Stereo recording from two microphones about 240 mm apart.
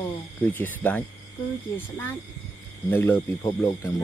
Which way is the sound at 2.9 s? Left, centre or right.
Centre.